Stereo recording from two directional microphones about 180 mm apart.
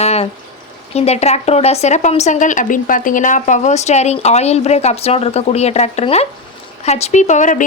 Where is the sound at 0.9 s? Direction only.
35° left (ahead or behind).